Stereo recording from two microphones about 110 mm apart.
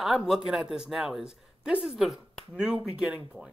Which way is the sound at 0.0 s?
Centre (ahead or behind).